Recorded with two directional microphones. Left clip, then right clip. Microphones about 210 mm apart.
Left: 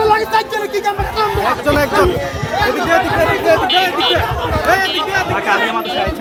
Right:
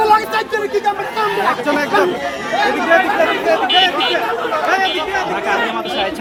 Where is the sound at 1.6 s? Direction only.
55° left (ahead or behind).